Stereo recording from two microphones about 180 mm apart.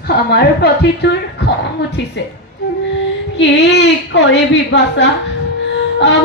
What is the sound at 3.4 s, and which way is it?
A woman's voice, 75° left (ahead or behind).